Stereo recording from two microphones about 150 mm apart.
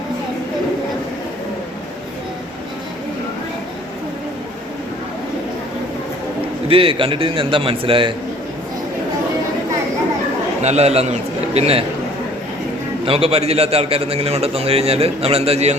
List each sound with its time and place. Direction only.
6.7 s a man's voice: 35° right (ahead or behind)
10.6 s a man's voice: 45° right (ahead or behind)
13.1 s a man's voice: 40° right (ahead or behind)